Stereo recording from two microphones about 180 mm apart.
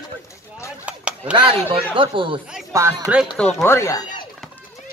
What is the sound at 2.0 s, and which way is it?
Speech, 30° right (ahead or behind).